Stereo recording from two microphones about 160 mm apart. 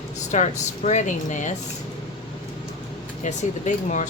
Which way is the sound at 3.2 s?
50° left (ahead or behind).